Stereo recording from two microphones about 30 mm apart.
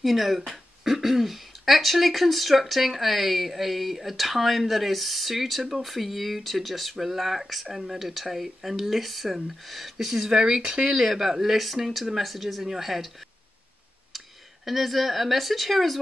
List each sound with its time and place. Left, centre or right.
0.0 s speech: centre
7.7 s speech: centre
10.3 s speech: right; by 12.6 s centre
12.6 s speech: centre
14.1 s speech: centre